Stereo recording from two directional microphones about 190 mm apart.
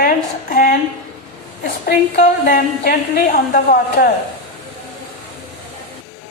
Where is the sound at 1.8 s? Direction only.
50° left (ahead or behind).